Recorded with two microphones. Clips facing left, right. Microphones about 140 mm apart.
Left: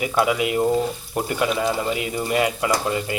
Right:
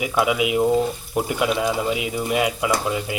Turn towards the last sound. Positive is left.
turn(degrees=0)  # may be behind; listen again after turning